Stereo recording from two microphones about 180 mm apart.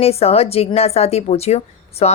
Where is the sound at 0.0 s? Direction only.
35° left (ahead or behind).